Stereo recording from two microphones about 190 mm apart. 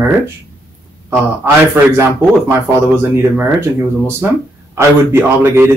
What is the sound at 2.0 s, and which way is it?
Speech, 10° right (ahead or behind).